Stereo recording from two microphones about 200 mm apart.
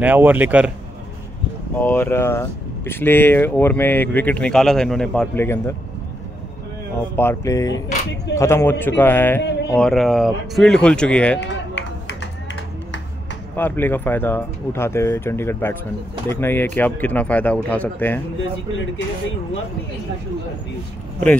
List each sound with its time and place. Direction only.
0.0 s speech: 10° right (ahead or behind)
1.8 s speech: 10° left (ahead or behind)
7.2 s speech: 15° left (ahead or behind)
9.4 s a sound: 60° left (ahead or behind)
9.8 s speech: centre (ahead or behind)
11.3 s a sound: 65° left (ahead or behind)
13.6 s speech: 10° left (ahead or behind)